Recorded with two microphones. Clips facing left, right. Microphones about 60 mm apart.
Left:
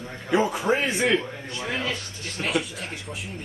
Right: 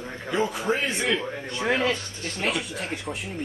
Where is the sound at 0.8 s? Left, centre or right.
Centre.